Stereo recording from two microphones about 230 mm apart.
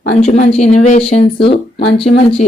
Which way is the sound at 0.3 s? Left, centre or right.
Left.